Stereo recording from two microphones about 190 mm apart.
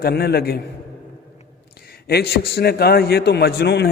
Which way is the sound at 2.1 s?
55° left (ahead or behind).